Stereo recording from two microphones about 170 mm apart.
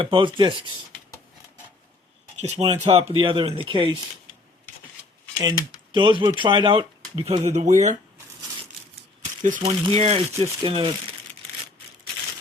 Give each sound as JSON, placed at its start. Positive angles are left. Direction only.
{"t": 0.0, "sound": "speech", "side_deg": -30}
{"t": 2.4, "sound": "speech", "side_deg": -40}
{"t": 5.4, "sound": "speech", "side_deg": -25}
{"t": 9.4, "sound": "speech", "side_deg": -45}
{"t": 10.6, "sound": "speech", "side_deg": -30}